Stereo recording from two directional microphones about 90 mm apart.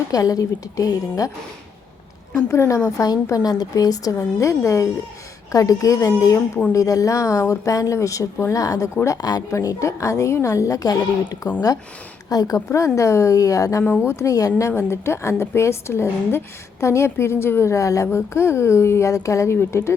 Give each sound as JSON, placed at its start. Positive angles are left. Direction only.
{"t": 0.1, "sound": "a woman's voice", "side_deg": 40}
{"t": 2.5, "sound": "a woman's voice", "side_deg": 35}
{"t": 9.5, "sound": "a woman's voice", "side_deg": 35}
{"t": 14.7, "sound": "a woman's voice", "side_deg": 30}